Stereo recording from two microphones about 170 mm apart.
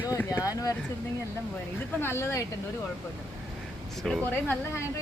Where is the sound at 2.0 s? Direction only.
15° left (ahead or behind).